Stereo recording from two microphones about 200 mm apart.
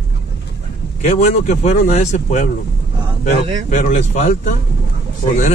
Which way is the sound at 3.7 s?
35° left (ahead or behind).